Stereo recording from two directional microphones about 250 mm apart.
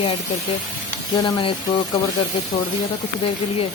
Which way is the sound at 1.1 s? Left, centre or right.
Centre.